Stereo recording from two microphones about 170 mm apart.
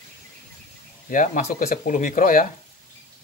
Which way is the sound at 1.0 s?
50° left (ahead or behind).